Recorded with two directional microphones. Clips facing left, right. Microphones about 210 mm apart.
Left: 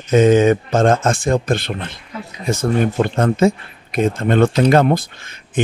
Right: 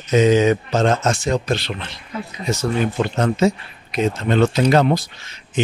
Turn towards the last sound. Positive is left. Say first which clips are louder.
# left 2 dB
turn(degrees=55)  # may be behind; listen again after turning